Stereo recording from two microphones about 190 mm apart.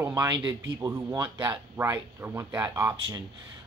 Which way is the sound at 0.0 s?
20° right (ahead or behind).